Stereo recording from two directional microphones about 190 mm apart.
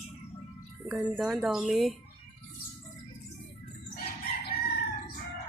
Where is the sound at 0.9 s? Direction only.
Centre (ahead or behind).